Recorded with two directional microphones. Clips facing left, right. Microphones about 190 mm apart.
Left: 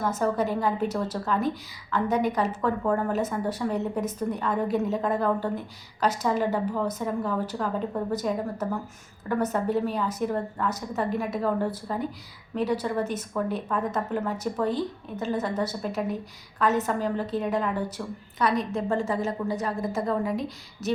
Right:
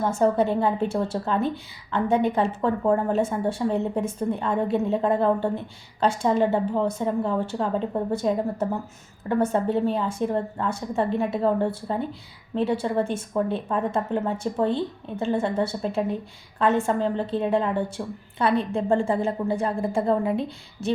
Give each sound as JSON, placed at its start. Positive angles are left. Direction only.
{"t": 0.0, "sound": "a woman's voice", "side_deg": -30}